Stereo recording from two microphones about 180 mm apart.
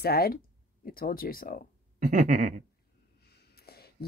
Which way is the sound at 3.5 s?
60° left (ahead or behind).